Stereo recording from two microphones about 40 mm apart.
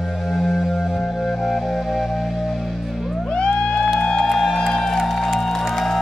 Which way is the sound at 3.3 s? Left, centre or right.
Left.